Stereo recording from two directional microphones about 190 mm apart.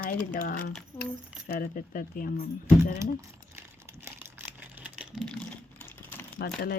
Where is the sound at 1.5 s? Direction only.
50° left (ahead or behind).